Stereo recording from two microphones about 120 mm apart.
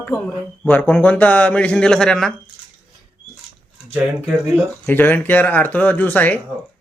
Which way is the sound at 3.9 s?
10° right (ahead or behind).